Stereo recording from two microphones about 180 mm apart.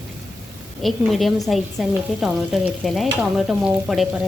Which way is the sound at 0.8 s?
Centre (ahead or behind).